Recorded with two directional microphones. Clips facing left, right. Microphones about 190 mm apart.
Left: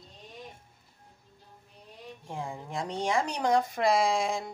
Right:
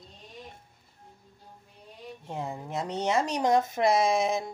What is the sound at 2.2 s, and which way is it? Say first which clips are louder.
Speech: right 2 dB; 20° right (ahead or behind).